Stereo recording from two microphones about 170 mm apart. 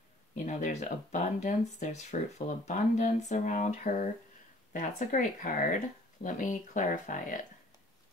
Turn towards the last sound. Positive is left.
turn(degrees=50)  # may be behind; listen again after turning